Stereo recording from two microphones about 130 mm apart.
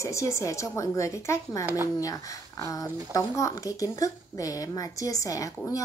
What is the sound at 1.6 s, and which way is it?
Speech, 20° right (ahead or behind).